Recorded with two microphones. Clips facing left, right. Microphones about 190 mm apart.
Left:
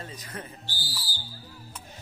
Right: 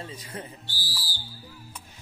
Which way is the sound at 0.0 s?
30° right (ahead or behind).